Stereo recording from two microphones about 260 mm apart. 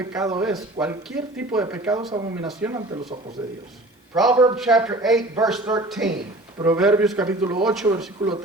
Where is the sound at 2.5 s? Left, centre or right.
Centre.